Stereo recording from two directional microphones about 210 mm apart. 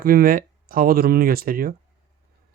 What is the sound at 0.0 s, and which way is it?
Speech, 45° right (ahead or behind).